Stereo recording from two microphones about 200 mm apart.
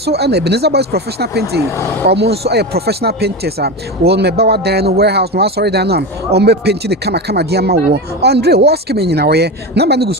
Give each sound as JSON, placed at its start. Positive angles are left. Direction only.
{"t": 0.0, "sound": "speech", "side_deg": -55}